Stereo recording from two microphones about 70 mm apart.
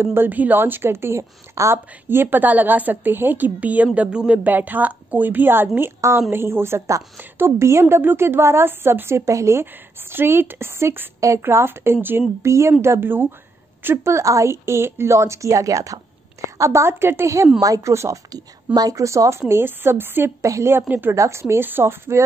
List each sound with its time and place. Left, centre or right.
0.0 s a woman's voice: right
2.0 s a woman's voice: right
5.9 s a woman's voice: right
11.1 s a woman's voice: right
11.4 s a woman's voice: right
12.4 s a woman's voice: right
17.6 s speech: right
17.9 s speech: right
18.3 s speech: right
19.4 s a woman's voice: right
20.4 s a woman's voice: right